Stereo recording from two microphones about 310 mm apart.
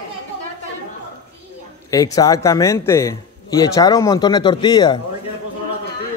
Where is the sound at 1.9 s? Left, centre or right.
Centre.